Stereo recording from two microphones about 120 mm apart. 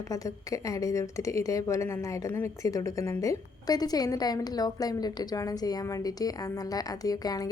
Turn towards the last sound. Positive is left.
turn(degrees=30)  # may be behind; listen again after turning